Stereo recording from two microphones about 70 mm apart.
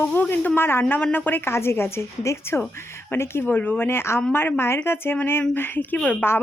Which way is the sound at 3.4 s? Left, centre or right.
Left.